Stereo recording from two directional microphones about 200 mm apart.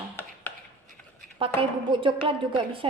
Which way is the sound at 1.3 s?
25° right (ahead or behind).